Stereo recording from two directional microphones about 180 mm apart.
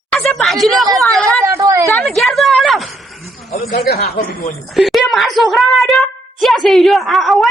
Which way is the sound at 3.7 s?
60° left (ahead or behind).